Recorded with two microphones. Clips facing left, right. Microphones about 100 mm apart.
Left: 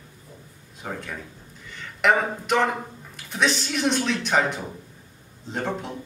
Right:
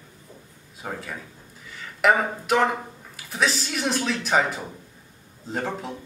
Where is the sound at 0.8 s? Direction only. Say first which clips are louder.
Even; 5° right (ahead or behind).